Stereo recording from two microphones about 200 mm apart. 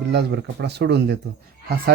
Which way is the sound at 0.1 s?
55° right (ahead or behind).